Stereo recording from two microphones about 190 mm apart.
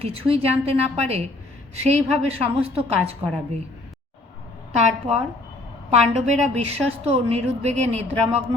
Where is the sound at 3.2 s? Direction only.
30° right (ahead or behind).